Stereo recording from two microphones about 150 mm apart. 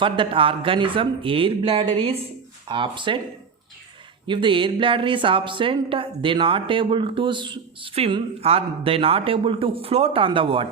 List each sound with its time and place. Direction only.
0.0 s a woman's voice: 35° right (ahead or behind)
4.3 s a woman's voice: 35° right (ahead or behind)